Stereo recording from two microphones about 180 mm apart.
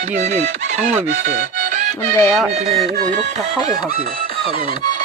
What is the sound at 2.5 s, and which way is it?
Music, 35° right (ahead or behind).